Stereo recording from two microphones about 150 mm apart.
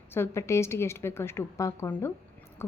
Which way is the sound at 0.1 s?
15° left (ahead or behind).